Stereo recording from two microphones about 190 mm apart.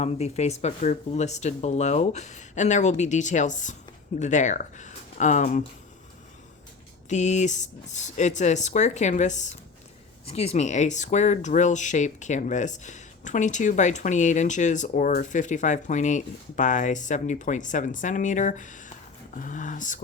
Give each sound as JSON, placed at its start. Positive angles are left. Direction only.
{"t": 0.0, "sound": "speech", "side_deg": 35}
{"t": 7.1, "sound": "speech", "side_deg": 40}